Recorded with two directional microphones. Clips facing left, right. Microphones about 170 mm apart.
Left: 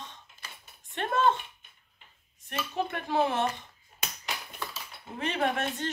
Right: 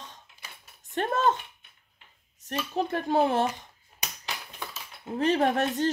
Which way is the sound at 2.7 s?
35° right (ahead or behind).